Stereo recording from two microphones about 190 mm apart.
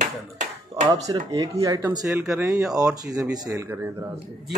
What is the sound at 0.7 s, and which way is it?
Speech, 20° right (ahead or behind).